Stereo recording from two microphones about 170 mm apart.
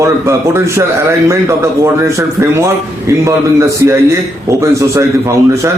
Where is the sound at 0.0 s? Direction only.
15° right (ahead or behind).